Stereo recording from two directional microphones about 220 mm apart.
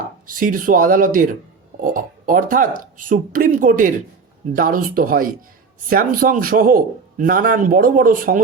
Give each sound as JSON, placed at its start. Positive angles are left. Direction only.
{"t": 0.3, "sound": "a man's voice", "side_deg": -40}